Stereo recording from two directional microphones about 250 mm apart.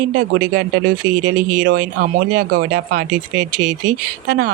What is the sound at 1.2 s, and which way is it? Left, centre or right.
Speech, right.